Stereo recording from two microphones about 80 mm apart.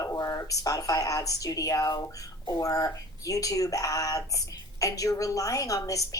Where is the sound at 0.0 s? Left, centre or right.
Left.